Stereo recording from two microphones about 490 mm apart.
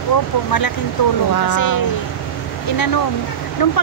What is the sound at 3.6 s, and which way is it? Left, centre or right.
Speech, left.